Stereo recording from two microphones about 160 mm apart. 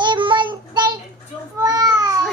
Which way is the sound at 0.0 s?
30° right (ahead or behind).